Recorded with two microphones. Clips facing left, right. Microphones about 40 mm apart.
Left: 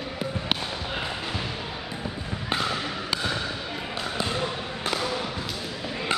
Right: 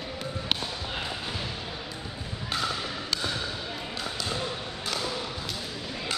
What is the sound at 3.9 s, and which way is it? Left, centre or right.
Basketball bounce, left.